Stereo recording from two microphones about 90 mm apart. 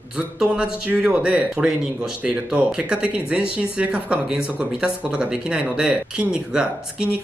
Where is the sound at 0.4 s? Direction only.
10° right (ahead or behind).